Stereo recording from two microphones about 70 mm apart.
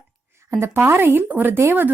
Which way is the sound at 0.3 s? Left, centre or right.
Right.